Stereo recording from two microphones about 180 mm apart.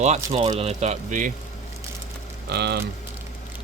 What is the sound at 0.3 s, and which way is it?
Speech, 30° right (ahead or behind).